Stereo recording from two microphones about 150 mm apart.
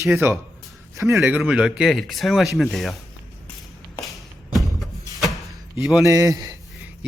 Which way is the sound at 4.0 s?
Centre (ahead or behind).